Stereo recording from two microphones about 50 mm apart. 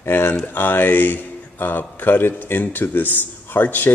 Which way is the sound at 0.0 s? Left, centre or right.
Left.